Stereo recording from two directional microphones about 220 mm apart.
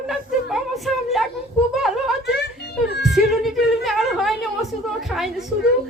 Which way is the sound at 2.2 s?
50° left (ahead or behind).